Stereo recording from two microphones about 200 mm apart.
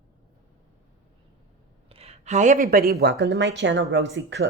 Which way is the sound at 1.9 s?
30° right (ahead or behind).